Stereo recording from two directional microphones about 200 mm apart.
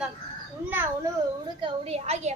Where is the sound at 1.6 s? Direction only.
30° right (ahead or behind).